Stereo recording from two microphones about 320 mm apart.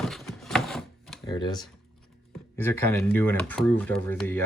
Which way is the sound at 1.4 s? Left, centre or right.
Centre.